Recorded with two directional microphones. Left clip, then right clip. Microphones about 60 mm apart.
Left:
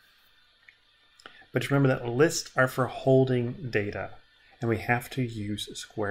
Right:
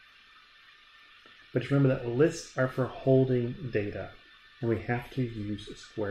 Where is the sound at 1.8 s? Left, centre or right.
Left.